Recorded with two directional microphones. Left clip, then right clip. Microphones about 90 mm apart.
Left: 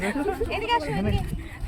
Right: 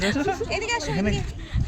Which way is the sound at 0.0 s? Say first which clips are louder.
Right 2 dB; 20° right (ahead or behind).